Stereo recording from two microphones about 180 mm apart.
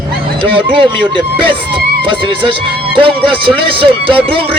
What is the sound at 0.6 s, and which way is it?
Speech, 30° right (ahead or behind).